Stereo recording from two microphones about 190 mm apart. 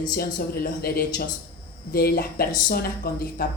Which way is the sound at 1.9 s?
55° left (ahead or behind).